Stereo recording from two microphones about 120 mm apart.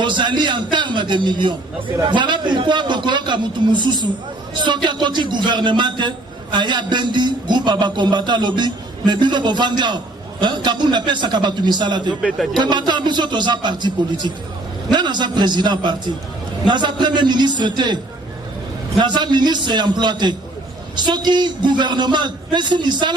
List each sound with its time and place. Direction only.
0.0 s a man's voice: 40° right (ahead or behind)
18.9 s a man's voice: 40° right (ahead or behind)